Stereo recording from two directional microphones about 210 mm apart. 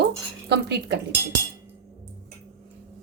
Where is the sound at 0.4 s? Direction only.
55° right (ahead or behind).